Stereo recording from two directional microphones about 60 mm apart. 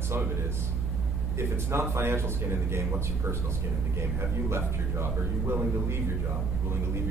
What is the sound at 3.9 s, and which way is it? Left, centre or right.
A man's voice, right.